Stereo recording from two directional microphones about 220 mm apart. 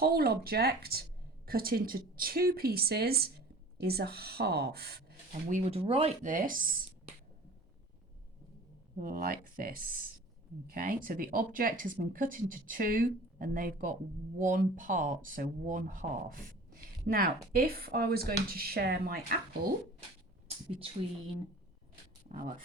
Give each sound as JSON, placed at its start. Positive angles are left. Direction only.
{"t": 0.0, "sound": "a woman's voice", "side_deg": -45}
{"t": 9.0, "sound": "speech", "side_deg": -40}
{"t": 22.3, "sound": "speech", "side_deg": -35}